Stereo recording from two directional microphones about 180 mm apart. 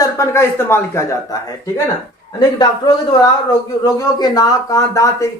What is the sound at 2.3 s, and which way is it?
Speech, 25° left (ahead or behind).